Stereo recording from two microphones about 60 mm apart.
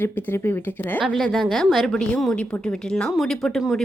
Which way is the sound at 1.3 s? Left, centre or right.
Centre.